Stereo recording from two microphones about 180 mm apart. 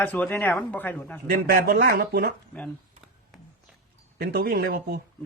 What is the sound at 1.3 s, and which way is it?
Speech, 55° right (ahead or behind).